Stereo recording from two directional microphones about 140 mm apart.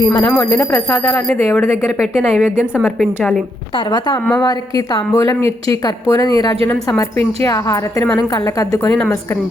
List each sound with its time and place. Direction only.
0.0 s speech: 25° left (ahead or behind)
2.1 s a woman's voice: 5° right (ahead or behind)
3.8 s speech: 30° left (ahead or behind)
5.4 s a woman's voice: 45° right (ahead or behind)
5.8 s speech: 25° left (ahead or behind)